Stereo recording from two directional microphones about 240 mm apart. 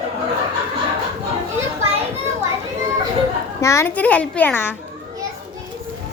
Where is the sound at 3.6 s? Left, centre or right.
Centre.